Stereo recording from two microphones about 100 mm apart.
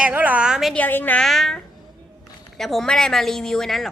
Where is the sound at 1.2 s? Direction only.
5° left (ahead or behind).